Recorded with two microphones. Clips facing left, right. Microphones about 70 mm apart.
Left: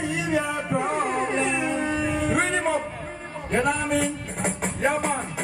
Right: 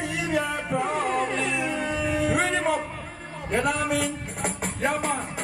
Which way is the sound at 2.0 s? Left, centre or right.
Centre.